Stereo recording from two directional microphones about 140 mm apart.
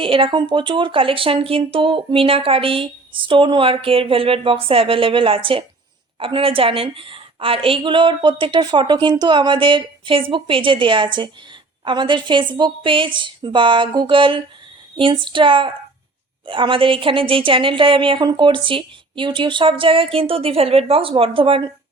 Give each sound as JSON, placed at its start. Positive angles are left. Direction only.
{"t": 0.0, "sound": "speech", "side_deg": -40}